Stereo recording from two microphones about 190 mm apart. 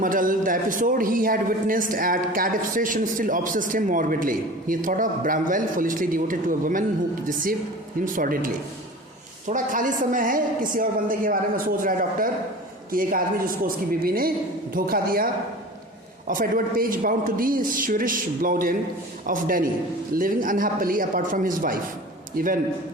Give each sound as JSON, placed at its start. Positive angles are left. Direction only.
{"t": 0.0, "sound": "a man's voice", "side_deg": -45}
{"t": 9.5, "sound": "a man's voice", "side_deg": -45}